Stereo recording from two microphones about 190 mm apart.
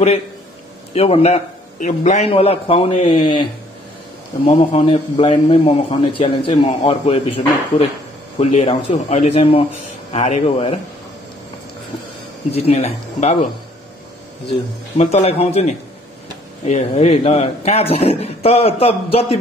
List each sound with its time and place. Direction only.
0.9 s a man's voice: 30° left (ahead or behind)
4.6 s a man's voice: 30° left (ahead or behind)
8.4 s a man's voice: 35° left (ahead or behind)
12.4 s a man's voice: 35° left (ahead or behind)
15.0 s a man's voice: 35° left (ahead or behind)
16.7 s a man's voice: 35° left (ahead or behind)